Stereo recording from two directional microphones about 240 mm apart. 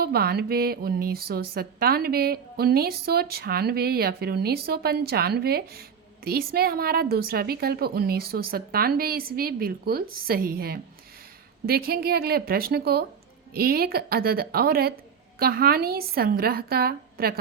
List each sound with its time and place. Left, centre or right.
0.0 s speech: right